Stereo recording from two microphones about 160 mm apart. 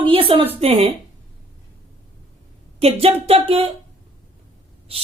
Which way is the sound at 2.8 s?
40° right (ahead or behind).